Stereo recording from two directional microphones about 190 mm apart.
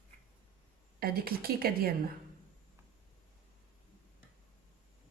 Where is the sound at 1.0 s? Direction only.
50° right (ahead or behind).